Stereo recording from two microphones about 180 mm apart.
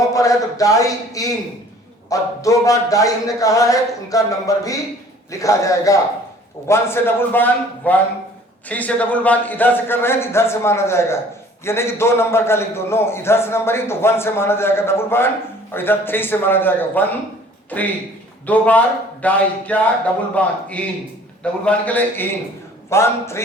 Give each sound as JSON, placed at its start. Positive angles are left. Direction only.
{"t": 0.1, "sound": "a man's voice", "side_deg": 20}